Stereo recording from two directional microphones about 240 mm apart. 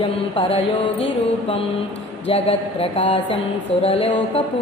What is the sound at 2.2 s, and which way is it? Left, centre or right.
Speech, left.